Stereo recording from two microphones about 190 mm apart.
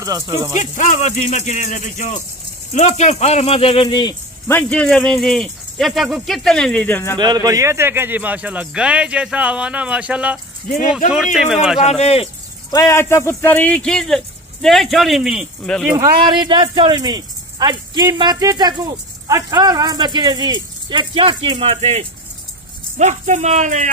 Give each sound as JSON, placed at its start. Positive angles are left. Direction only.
{"t": 0.0, "sound": "speech", "side_deg": -15}
{"t": 0.6, "sound": "speech", "side_deg": 40}
{"t": 4.5, "sound": "speech", "side_deg": 10}
{"t": 7.2, "sound": "speech", "side_deg": -20}
{"t": 11.8, "sound": "speech", "side_deg": 35}
{"t": 12.7, "sound": "speech", "side_deg": 15}
{"t": 16.0, "sound": "speech", "side_deg": -20}